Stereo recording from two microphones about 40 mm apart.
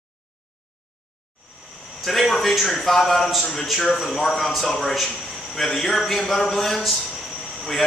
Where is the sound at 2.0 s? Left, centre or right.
Centre.